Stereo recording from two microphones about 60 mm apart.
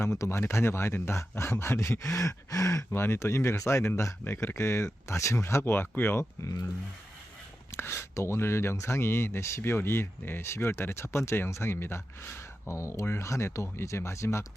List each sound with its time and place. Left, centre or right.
0.0 s speech: left
2.9 s speech: left
5.6 s speech: left
6.4 s speech: left
7.8 s speech: left